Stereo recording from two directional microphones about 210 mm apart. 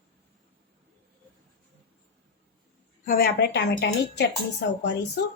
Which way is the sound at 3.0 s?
45° left (ahead or behind).